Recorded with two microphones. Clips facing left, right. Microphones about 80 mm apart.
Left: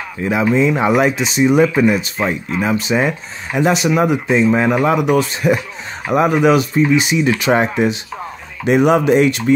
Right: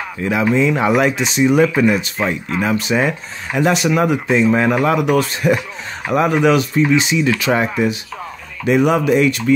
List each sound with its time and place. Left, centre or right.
0.2 s speech: centre
1.1 s speech: centre
7.2 s speech: left